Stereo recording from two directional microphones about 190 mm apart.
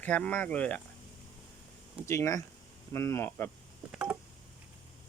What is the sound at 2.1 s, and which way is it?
Speech, 15° left (ahead or behind).